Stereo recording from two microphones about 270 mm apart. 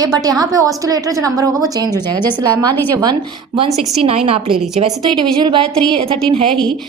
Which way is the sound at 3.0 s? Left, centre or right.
Centre.